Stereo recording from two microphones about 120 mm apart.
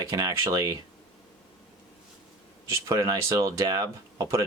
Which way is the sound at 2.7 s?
25° right (ahead or behind).